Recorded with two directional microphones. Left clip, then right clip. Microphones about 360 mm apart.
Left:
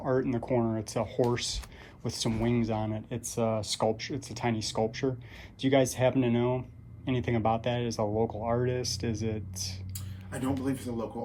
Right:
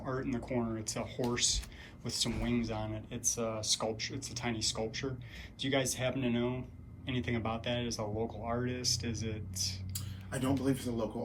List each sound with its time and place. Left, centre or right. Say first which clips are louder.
0.0 s speech: left 8 dB; centre
10.3 s a man's voice: left 1 dB; centre